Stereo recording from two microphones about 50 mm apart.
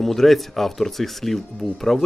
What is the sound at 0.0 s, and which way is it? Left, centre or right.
Speech, centre.